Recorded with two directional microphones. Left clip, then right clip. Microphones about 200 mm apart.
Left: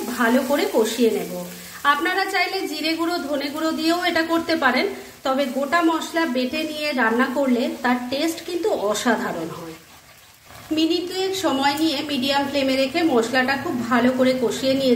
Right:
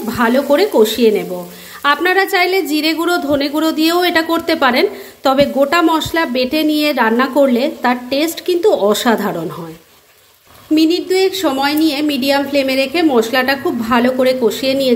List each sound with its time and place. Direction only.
0.2 s a woman's voice: 45° right (ahead or behind)
10.8 s a woman's voice: 35° right (ahead or behind)